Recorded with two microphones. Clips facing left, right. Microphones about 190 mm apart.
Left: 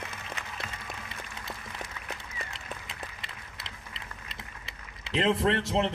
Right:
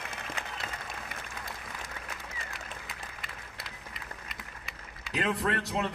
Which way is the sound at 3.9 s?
25° left (ahead or behind).